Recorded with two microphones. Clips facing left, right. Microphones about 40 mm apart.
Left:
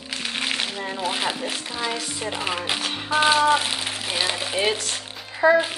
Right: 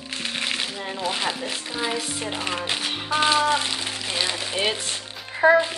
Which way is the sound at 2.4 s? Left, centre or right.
Centre.